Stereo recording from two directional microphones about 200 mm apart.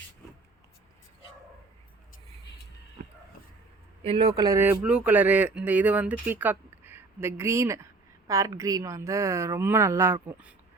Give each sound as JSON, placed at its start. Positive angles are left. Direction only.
{"t": 4.0, "sound": "speech", "side_deg": -30}
{"t": 4.4, "sound": "speech", "side_deg": -15}